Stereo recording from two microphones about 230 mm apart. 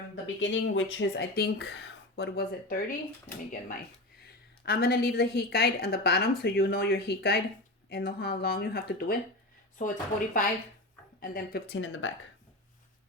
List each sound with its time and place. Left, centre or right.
0.3 s a woman's voice: left
4.6 s a woman's voice: left